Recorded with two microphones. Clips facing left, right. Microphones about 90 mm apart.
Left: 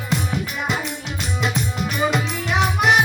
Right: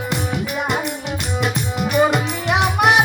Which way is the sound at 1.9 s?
60° right (ahead or behind).